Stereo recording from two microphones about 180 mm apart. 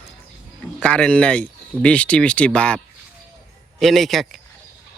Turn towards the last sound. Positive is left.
turn(degrees=0)  # may be behind; listen again after turning